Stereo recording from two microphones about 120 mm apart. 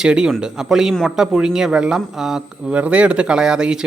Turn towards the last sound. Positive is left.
turn(degrees=-5)  # may be behind; listen again after turning